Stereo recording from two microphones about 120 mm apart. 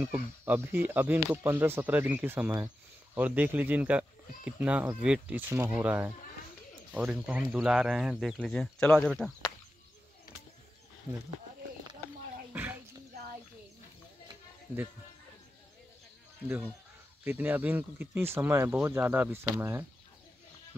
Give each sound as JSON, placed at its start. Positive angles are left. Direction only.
{"t": 0.0, "sound": "speech", "side_deg": -15}
{"t": 12.5, "sound": "a sound", "side_deg": -15}
{"t": 16.4, "sound": "speech", "side_deg": -15}